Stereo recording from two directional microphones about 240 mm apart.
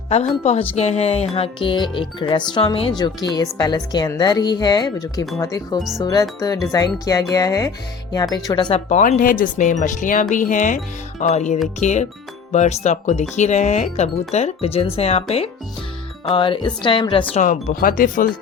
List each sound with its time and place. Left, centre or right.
0.8 s a woman's voice: left